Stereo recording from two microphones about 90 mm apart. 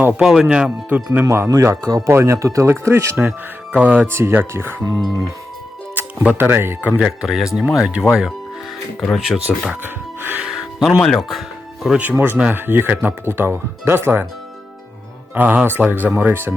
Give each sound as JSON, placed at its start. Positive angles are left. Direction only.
{"t": 0.1, "sound": "speech", "side_deg": -5}
{"t": 1.2, "sound": "speech", "side_deg": -35}
{"t": 4.9, "sound": "speech", "side_deg": -50}
{"t": 5.9, "sound": "music", "side_deg": -20}
{"t": 6.3, "sound": "speech", "side_deg": -25}
{"t": 7.0, "sound": "speech", "side_deg": -5}
{"t": 9.1, "sound": "speech", "side_deg": 0}
{"t": 9.8, "sound": "speech", "side_deg": -20}
{"t": 10.4, "sound": "music", "side_deg": -5}
{"t": 11.0, "sound": "speech", "side_deg": 5}
{"t": 12.1, "sound": "speech", "side_deg": -25}
{"t": 15.4, "sound": "speech", "side_deg": -20}